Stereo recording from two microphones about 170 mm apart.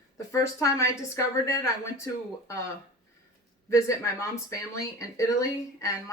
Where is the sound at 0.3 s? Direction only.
20° left (ahead or behind).